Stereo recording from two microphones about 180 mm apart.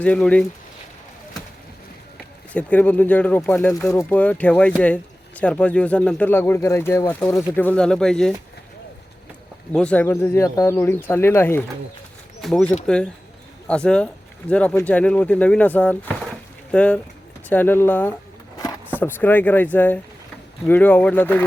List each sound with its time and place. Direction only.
0.0 s speech: 5° left (ahead or behind)
2.5 s speech: 10° left (ahead or behind)
9.7 s speech: 5° left (ahead or behind)
12.4 s speech: centre (ahead or behind)
18.5 s a sound: 20° left (ahead or behind)
18.9 s speech: 10° left (ahead or behind)